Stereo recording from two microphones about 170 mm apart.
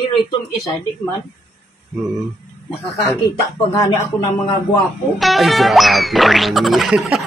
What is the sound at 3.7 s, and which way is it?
Speech, 20° left (ahead or behind).